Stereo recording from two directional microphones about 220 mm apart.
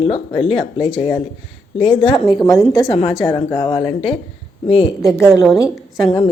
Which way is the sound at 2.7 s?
15° left (ahead or behind).